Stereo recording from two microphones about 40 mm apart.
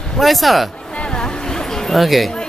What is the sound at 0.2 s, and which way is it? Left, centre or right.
Speech, centre.